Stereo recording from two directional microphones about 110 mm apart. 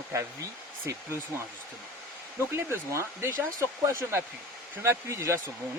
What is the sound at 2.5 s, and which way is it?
Speech, 20° right (ahead or behind).